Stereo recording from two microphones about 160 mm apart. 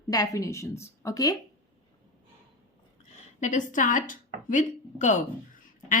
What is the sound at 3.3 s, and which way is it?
A woman's voice, 50° left (ahead or behind).